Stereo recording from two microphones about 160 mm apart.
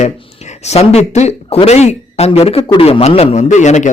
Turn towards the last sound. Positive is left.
turn(degrees=50)  # may be behind; listen again after turning